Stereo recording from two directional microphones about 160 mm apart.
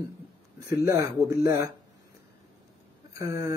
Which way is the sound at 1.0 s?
20° right (ahead or behind).